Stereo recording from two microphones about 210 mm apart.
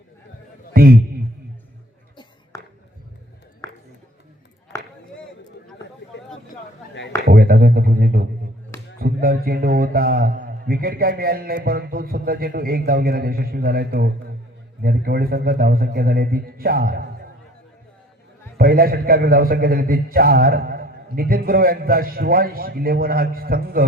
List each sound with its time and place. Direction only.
0.7 s a man's voice: 45° right (ahead or behind)
2.5 s a sound: 15° left (ahead or behind)
3.6 s music: 15° left (ahead or behind)
4.7 s chop: 15° left (ahead or behind)
7.3 s a sound: 45° right (ahead or behind)
14.8 s a man's voice: 45° right (ahead or behind)
18.5 s a man's voice: 45° right (ahead or behind)